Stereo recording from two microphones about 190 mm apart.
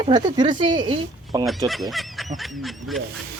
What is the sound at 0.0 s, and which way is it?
Speech, 25° right (ahead or behind).